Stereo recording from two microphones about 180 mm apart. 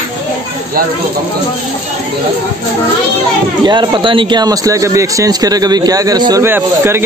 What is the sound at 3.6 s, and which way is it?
Speech, 25° right (ahead or behind).